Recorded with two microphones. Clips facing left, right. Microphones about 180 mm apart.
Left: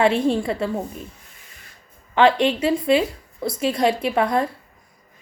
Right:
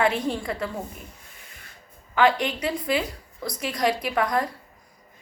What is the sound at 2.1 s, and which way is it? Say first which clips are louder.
A woman's voice: left 5 dB; 30° left (ahead or behind).